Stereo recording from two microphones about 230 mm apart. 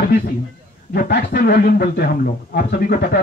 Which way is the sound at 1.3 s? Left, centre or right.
Left.